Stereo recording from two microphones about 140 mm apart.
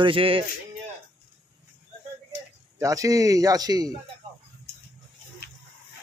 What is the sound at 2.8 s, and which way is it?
A man's voice, 25° right (ahead or behind).